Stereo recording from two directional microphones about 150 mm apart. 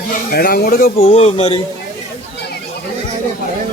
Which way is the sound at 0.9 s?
40° left (ahead or behind).